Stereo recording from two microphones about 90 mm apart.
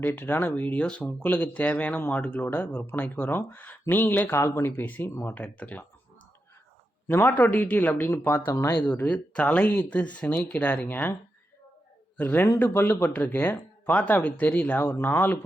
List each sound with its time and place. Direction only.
0.2 s speech: 20° left (ahead or behind)
5.3 s speech: 15° left (ahead or behind)
7.1 s speech: 20° left (ahead or behind)
12.1 s a man's voice: 20° left (ahead or behind)